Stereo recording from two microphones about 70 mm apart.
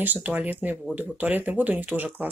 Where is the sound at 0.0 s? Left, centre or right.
Right.